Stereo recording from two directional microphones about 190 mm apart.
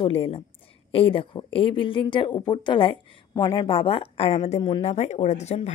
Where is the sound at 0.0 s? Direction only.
30° left (ahead or behind).